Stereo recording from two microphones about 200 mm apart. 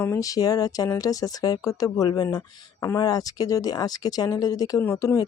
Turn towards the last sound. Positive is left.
turn(degrees=15)  # may be behind; listen again after turning